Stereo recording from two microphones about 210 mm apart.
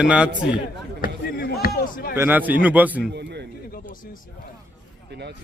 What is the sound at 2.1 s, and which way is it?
Speech, 10° right (ahead or behind).